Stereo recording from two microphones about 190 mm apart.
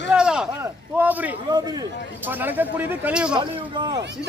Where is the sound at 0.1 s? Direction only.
5° right (ahead or behind).